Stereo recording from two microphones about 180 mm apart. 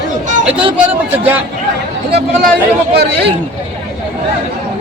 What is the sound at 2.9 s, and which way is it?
Speech, 65° right (ahead or behind).